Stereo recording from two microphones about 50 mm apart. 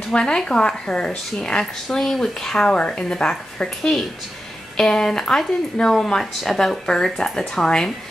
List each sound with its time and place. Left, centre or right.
0.1 s a woman's voice: centre